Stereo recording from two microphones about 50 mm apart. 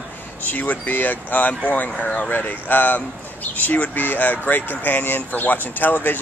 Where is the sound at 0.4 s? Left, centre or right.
Left.